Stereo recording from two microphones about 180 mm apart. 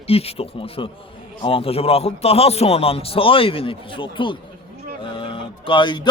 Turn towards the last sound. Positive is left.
turn(degrees=25)  # may be behind; listen again after turning